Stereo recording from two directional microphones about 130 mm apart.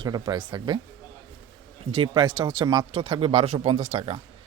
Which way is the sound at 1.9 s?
45° right (ahead or behind).